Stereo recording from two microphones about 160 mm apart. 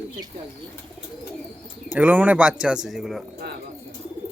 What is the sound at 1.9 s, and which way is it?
Speech, 10° right (ahead or behind).